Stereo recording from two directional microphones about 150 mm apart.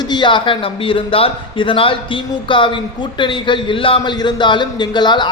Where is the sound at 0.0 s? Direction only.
30° left (ahead or behind).